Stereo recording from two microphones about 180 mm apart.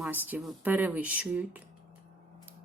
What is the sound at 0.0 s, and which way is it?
Speech, 10° right (ahead or behind).